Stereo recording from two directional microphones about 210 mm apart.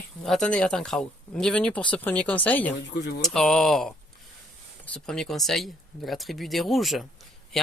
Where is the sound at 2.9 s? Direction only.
55° left (ahead or behind).